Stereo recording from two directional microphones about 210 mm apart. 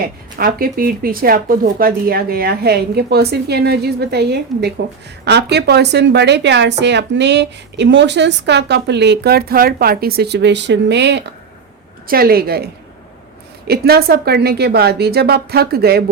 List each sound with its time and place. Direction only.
0.3 s speech: 45° right (ahead or behind)